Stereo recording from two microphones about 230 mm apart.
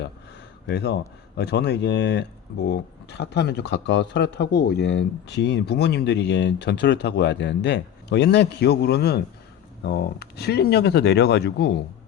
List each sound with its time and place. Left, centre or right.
0.7 s speech: left